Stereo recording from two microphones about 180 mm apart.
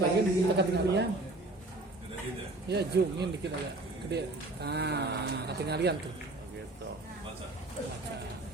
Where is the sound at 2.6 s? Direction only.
65° right (ahead or behind).